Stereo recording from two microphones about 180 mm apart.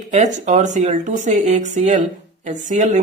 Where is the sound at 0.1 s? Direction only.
45° right (ahead or behind).